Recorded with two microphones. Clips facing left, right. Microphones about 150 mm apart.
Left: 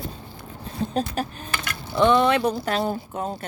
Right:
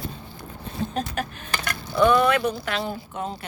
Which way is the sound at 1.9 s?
25° left (ahead or behind).